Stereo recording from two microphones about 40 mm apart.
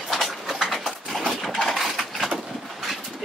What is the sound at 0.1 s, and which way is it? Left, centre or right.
Clip-clop, centre.